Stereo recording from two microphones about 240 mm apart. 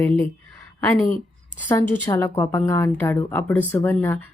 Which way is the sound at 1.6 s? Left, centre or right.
Centre.